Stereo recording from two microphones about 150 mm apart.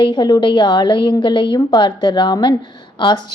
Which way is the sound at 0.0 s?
30° left (ahead or behind).